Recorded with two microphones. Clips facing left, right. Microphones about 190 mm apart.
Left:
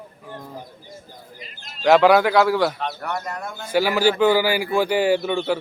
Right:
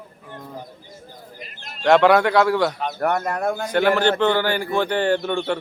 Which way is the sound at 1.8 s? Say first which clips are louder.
Even; centre (ahead or behind).